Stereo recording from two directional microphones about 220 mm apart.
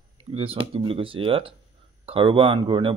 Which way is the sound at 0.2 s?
25° right (ahead or behind).